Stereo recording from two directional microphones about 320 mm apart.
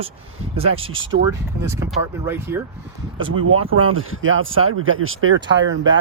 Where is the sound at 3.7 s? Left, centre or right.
Right.